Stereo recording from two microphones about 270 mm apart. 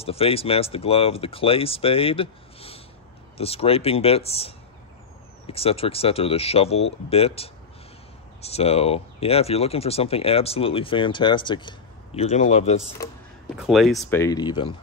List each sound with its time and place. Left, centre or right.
0.0 s speech: left
13.6 s speech: centre
14.2 s speech: centre